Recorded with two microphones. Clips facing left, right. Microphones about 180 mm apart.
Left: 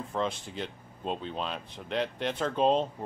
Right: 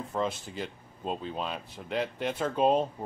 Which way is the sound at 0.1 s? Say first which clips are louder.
Even; 5° right (ahead or behind).